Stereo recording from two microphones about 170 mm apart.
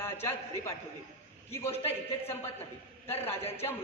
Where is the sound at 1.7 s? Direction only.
35° left (ahead or behind).